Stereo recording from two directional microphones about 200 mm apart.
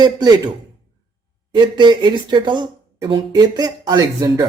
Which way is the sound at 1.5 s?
20° right (ahead or behind).